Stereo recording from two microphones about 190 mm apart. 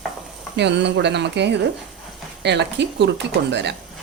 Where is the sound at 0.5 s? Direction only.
65° right (ahead or behind).